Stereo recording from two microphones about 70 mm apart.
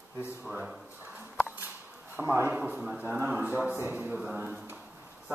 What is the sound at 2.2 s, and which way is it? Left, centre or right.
Speech, right.